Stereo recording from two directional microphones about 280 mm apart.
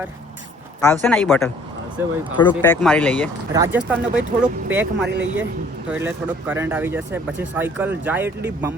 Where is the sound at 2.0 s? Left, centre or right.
Centre.